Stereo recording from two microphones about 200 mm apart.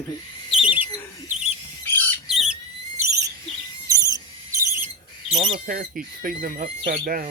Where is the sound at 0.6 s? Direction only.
10° right (ahead or behind).